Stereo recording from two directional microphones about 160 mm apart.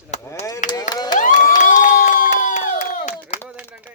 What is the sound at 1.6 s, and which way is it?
Crowd, 55° left (ahead or behind).